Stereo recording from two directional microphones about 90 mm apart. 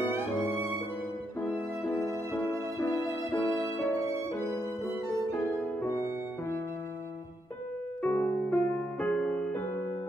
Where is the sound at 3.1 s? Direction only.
35° right (ahead or behind).